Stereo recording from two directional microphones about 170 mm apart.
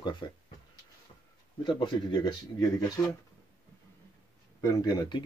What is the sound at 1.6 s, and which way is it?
Speech, 30° left (ahead or behind).